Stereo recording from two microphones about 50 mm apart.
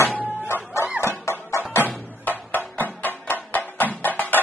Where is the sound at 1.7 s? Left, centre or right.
Left.